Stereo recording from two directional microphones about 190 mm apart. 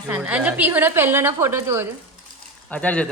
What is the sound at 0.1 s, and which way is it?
A woman's voice, 5° right (ahead or behind).